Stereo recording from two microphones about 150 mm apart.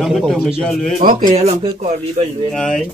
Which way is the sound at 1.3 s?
40° right (ahead or behind).